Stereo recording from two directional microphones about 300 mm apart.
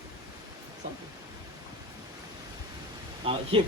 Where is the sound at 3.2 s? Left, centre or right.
Centre.